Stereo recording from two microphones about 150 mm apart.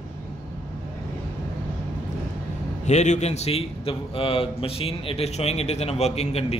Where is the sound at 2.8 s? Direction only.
50° left (ahead or behind).